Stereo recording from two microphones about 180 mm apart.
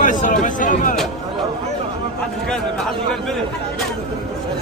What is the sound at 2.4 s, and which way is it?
Speech, 5° left (ahead or behind).